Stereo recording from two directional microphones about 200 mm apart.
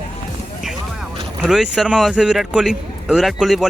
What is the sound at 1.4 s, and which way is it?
A man's voice, centre (ahead or behind).